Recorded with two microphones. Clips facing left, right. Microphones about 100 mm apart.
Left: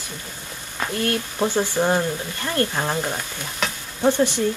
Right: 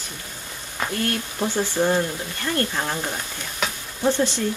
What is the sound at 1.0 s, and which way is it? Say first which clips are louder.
Speech: left 5 dB; 20° left (ahead or behind).